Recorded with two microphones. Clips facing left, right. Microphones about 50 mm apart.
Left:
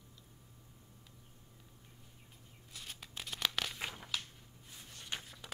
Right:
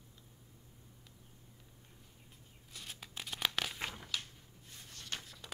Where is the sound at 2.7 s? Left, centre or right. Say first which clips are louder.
Even; centre.